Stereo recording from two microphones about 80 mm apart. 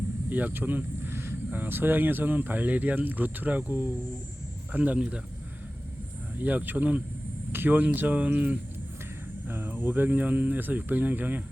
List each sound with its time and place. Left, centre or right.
0.3 s a sound: right
1.5 s speech: right
6.4 s speech: right